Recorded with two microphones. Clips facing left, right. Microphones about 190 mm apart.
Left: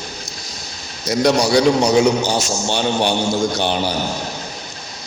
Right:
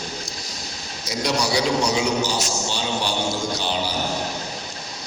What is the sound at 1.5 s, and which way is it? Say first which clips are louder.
A man's voice: left 7 dB; 60° left (ahead or behind).